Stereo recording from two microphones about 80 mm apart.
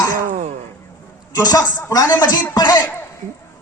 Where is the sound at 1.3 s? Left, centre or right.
Left.